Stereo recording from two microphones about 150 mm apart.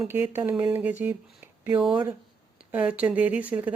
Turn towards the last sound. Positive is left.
turn(degrees=-10)  # may be behind; listen again after turning